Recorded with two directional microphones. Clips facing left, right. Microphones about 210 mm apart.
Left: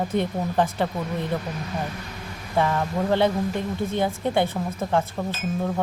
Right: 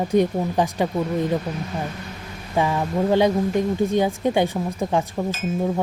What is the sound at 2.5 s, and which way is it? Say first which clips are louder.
A woman's voice: right 2 dB; 15° right (ahead or behind).